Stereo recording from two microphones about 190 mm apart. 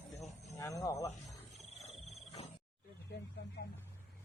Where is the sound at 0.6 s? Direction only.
15° left (ahead or behind).